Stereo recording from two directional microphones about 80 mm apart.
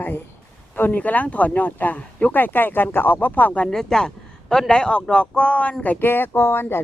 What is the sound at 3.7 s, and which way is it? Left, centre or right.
A man's voice, centre.